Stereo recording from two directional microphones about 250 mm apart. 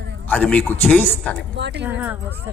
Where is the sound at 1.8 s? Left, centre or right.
Centre.